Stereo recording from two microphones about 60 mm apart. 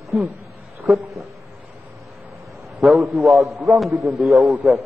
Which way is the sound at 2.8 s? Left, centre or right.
Centre.